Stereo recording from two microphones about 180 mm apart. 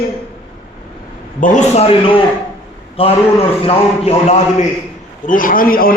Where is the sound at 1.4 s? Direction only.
45° left (ahead or behind).